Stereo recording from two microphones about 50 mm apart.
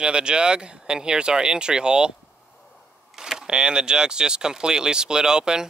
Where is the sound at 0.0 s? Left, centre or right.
Centre.